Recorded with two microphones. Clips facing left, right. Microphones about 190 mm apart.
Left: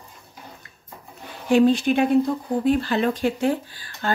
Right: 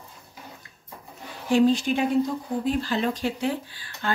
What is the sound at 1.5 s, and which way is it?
Speech, 60° left (ahead or behind).